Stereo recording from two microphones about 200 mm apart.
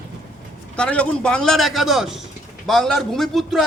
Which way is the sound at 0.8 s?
5° left (ahead or behind).